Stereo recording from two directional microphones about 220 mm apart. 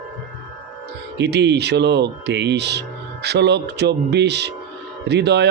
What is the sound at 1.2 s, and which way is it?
Speech, 50° right (ahead or behind).